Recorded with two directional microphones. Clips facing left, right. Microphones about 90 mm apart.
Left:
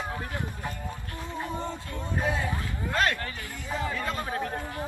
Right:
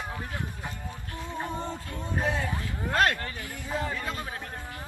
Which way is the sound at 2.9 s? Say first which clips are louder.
Right 2 dB; 45° right (ahead or behind).